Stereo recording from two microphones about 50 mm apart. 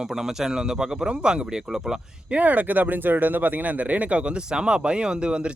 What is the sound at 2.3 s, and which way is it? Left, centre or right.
Speech, right.